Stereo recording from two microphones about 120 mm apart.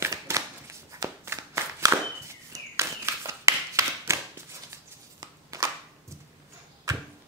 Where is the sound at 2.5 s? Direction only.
25° right (ahead or behind).